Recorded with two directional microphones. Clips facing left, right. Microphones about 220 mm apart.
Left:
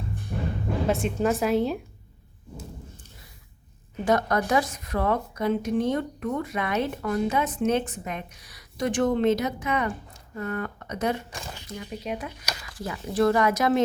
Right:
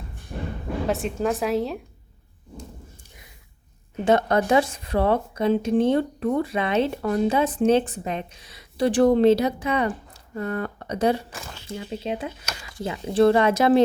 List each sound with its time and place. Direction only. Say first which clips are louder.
0.9 s a woman's voice: even; centre (ahead or behind)
4.0 s a woman's voice: right 4 dB; 25° right (ahead or behind)